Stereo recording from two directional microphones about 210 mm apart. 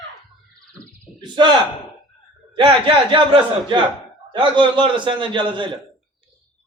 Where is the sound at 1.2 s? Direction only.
20° right (ahead or behind).